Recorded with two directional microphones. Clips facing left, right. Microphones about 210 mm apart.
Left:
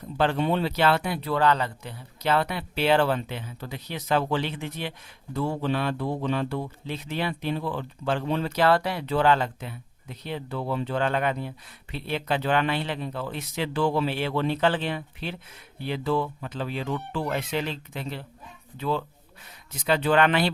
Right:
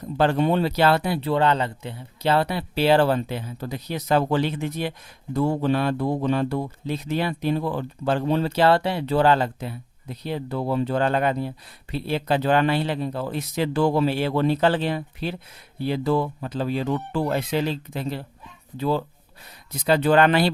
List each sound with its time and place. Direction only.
0.2 s speech: 45° right (ahead or behind)